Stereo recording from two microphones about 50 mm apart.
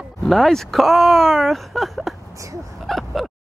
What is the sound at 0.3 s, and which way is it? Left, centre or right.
Speech, centre.